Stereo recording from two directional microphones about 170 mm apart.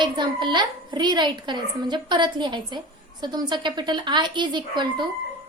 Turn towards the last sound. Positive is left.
turn(degrees=-25)  # may be behind; listen again after turning